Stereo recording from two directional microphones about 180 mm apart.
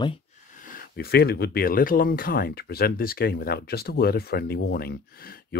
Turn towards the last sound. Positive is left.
turn(degrees=55)  # may be behind; listen again after turning